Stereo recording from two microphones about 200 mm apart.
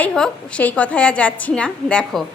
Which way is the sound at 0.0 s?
5° left (ahead or behind).